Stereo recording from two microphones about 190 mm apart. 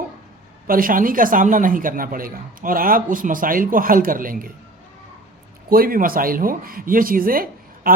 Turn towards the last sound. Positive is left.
turn(degrees=-50)  # may be behind; listen again after turning